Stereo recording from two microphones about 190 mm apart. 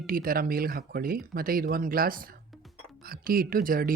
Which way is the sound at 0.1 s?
50° right (ahead or behind).